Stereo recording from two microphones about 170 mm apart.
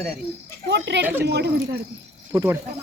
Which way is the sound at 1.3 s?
75° right (ahead or behind).